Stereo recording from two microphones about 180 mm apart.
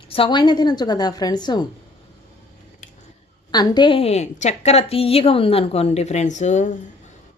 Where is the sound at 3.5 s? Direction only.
20° left (ahead or behind).